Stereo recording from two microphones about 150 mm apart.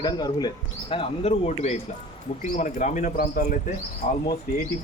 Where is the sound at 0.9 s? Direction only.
45° left (ahead or behind).